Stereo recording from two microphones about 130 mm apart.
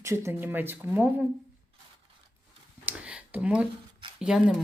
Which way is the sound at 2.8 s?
10° right (ahead or behind).